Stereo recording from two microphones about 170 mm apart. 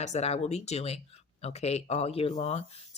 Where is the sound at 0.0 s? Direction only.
40° left (ahead or behind).